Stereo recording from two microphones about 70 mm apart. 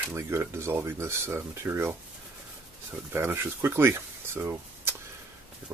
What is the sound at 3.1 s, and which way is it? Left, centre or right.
Speech, right.